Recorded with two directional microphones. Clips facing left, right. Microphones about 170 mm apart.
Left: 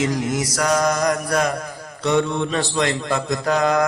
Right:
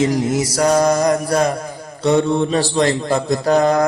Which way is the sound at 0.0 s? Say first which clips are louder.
Right 5 dB; 30° right (ahead or behind).